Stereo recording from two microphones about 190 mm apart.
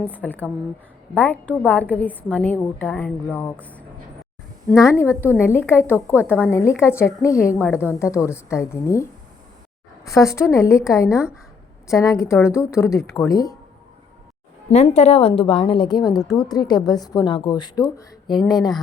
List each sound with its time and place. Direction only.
0.1 s a woman's voice: 10° left (ahead or behind)
10.1 s a woman's voice: 15° left (ahead or behind)
14.7 s a woman's voice: 35° left (ahead or behind)